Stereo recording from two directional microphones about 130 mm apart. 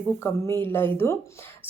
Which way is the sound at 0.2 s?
20° left (ahead or behind).